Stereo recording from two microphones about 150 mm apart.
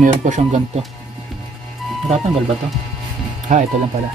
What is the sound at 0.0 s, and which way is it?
Speech, 55° right (ahead or behind).